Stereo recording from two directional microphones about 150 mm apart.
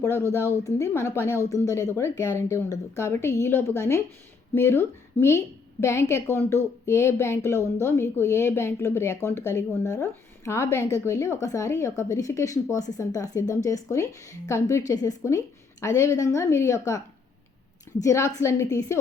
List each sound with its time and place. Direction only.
0.2 s speech: 15° right (ahead or behind)
0.6 s a woman's voice: 20° left (ahead or behind)
18.0 s a woman's voice: 20° left (ahead or behind)